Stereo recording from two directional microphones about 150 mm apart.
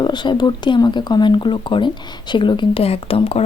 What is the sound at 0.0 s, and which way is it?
A woman's voice, 30° left (ahead or behind).